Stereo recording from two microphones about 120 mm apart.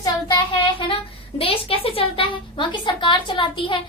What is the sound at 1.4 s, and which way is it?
A woman's voice, 50° left (ahead or behind).